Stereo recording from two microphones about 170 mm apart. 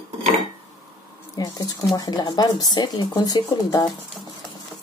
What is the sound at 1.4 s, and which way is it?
Speech, 20° left (ahead or behind).